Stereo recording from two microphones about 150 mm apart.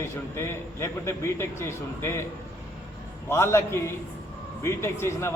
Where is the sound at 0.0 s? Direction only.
15° left (ahead or behind).